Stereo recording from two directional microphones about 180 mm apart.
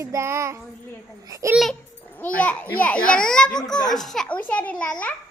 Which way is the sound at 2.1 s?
10° left (ahead or behind).